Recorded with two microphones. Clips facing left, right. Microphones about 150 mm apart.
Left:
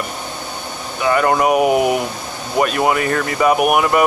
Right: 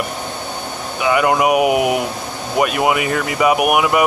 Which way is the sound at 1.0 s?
10° right (ahead or behind).